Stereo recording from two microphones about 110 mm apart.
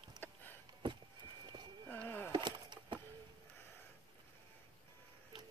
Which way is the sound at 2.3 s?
45° right (ahead or behind).